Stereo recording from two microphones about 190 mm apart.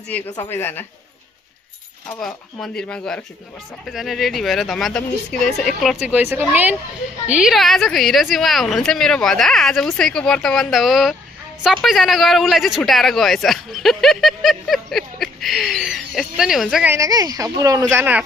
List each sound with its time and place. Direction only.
0.3 s a woman's voice: 15° left (ahead or behind)
2.2 s speech: 5° left (ahead or behind)
16.9 s speech: 20° right (ahead or behind)